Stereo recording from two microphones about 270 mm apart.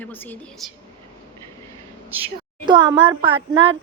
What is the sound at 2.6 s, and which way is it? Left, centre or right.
Speech, centre.